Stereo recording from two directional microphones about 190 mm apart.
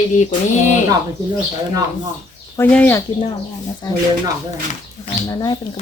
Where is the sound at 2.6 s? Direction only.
10° left (ahead or behind).